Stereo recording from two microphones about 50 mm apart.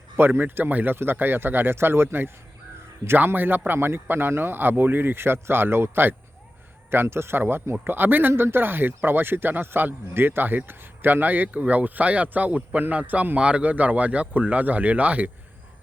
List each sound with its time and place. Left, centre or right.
0.2 s a man's voice: right
3.2 s speech: right
7.7 s speech: right
8.3 s a man's voice: right